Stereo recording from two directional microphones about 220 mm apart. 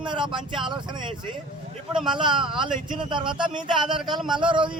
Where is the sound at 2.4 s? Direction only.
25° right (ahead or behind).